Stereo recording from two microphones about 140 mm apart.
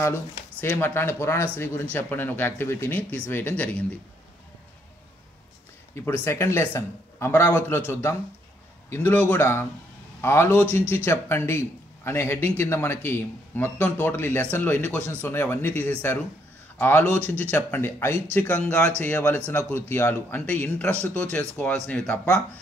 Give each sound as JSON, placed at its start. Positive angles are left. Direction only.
{"t": 0.0, "sound": "a man's voice", "side_deg": 15}
{"t": 5.9, "sound": "a man's voice", "side_deg": 15}